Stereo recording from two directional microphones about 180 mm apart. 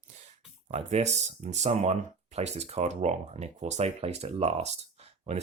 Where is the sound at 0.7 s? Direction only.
40° right (ahead or behind).